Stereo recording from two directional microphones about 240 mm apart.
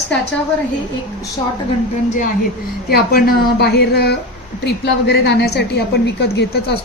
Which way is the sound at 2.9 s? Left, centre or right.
Left.